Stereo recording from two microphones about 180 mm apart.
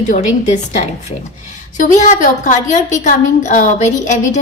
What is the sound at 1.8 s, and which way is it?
A woman's voice, 45° left (ahead or behind).